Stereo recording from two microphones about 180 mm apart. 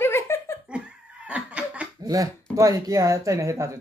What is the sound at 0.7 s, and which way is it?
Laughter, 5° right (ahead or behind).